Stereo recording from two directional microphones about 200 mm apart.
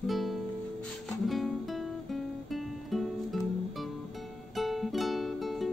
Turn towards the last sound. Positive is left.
turn(degrees=0)  # may be behind; listen again after turning